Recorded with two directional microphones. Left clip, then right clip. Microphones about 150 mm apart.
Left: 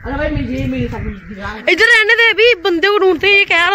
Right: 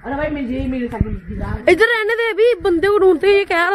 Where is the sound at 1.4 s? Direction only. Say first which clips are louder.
Left 2 dB; 25° right (ahead or behind).